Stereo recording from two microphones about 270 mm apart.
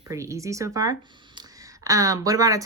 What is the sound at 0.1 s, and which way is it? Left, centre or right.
Speech, centre.